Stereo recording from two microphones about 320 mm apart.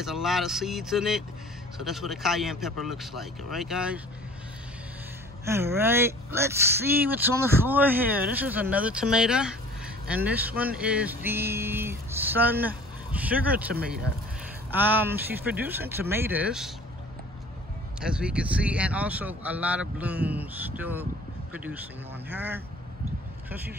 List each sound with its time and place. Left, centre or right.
0.0 s speech: centre
5.4 s speech: centre
13.7 s speech: right
14.7 s speech: centre
18.0 s speech: centre
22.3 s speech: centre